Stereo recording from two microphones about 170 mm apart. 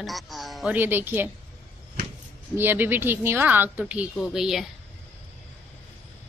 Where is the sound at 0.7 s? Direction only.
10° right (ahead or behind).